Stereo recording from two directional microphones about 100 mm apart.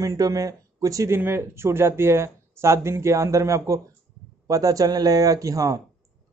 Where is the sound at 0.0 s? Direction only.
35° right (ahead or behind).